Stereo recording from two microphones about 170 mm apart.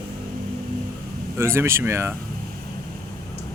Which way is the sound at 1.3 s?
15° right (ahead or behind).